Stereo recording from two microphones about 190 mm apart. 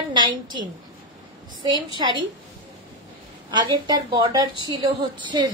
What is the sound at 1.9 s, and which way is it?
Speech, 25° right (ahead or behind).